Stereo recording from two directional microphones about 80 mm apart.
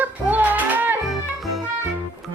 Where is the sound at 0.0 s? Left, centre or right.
Right.